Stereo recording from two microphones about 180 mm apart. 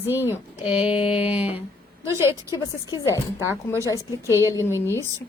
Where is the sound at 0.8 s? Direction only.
30° left (ahead or behind).